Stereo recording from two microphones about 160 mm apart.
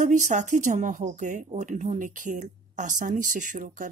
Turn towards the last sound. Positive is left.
turn(degrees=-55)  # may be behind; listen again after turning